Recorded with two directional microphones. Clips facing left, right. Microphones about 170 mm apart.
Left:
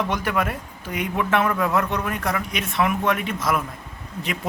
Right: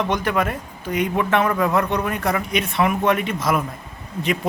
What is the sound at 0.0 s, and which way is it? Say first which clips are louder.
Speech: right 3 dB; 5° left (ahead or behind).